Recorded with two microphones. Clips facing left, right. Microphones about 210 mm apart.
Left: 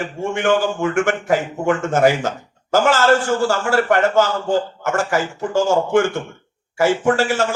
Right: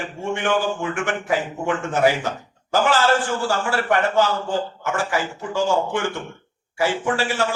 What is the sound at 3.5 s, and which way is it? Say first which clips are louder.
A man's voice: left 4 dB; 45° left (ahead or behind).